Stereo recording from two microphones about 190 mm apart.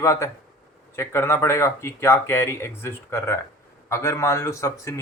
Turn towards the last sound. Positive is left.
turn(degrees=15)  # may be behind; listen again after turning